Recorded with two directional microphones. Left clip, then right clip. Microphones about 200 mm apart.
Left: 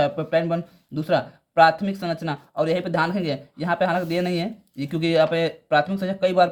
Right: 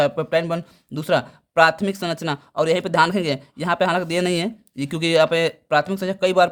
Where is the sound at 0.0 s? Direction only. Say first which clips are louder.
Right 2 dB; 45° right (ahead or behind).